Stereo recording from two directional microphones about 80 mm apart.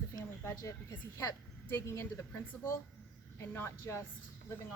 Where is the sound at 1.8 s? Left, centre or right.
Left.